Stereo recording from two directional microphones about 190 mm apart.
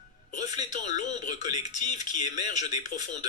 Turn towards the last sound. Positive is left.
turn(degrees=40)  # may be behind; listen again after turning